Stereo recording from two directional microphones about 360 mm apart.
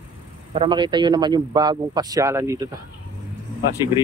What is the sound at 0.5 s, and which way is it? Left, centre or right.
Speech, centre.